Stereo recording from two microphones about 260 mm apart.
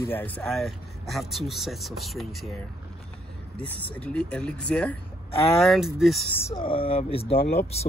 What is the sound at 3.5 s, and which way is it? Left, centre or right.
Speech, centre.